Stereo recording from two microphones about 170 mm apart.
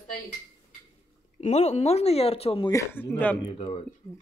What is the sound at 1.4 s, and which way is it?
Speech, 40° left (ahead or behind).